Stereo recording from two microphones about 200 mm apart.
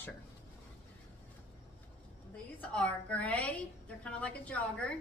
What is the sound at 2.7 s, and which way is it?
A woman's voice, 5° left (ahead or behind).